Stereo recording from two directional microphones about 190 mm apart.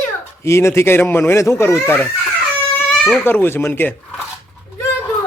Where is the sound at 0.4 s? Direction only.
15° left (ahead or behind).